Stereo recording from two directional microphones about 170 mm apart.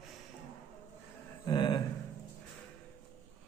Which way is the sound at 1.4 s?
25° left (ahead or behind).